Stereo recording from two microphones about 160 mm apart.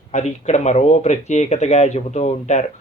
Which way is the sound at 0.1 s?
45° left (ahead or behind).